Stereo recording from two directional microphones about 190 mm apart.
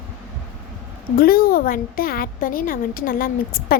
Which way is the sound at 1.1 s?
50° left (ahead or behind).